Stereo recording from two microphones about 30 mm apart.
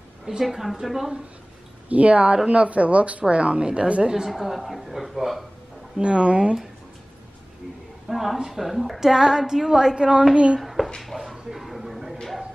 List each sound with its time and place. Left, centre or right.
0.4 s a woman's voice: centre
1.9 s speech: right
4.3 s speech: centre
5.9 s speech: right
8.1 s speech: centre
9.0 s a woman's voice: centre
9.9 s a woman's voice: right
10.6 s a sound: centre